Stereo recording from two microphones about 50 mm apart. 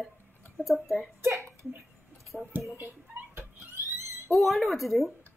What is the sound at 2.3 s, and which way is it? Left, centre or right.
Speech, left.